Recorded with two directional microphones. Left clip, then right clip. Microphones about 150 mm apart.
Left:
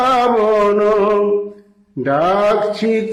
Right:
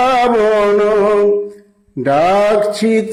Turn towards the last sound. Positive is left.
turn(degrees=-30)  # may be behind; listen again after turning